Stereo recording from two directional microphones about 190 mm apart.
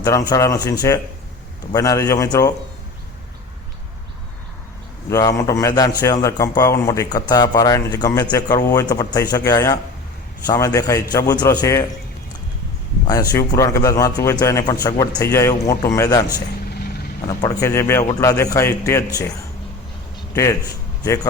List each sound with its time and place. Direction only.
0.0 s a man's voice: 20° left (ahead or behind)
5.0 s a man's voice: 15° left (ahead or behind)
13.1 s a man's voice: 20° left (ahead or behind)
16.6 s vehicle: 55° left (ahead or behind)
17.2 s a man's voice: 20° left (ahead or behind)
20.3 s a man's voice: 15° left (ahead or behind)